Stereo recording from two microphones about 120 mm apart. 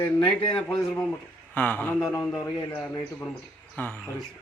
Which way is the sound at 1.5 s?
15° left (ahead or behind).